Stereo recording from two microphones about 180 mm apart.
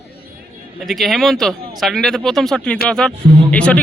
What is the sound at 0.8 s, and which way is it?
Speech, centre (ahead or behind).